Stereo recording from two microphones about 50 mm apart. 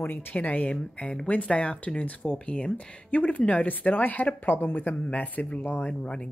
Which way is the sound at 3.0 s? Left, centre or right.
Left.